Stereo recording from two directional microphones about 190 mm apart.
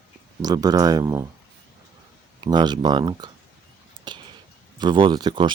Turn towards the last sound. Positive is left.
turn(degrees=-25)  # may be behind; listen again after turning